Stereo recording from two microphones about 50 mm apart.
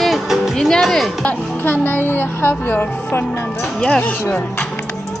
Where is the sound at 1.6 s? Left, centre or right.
Left.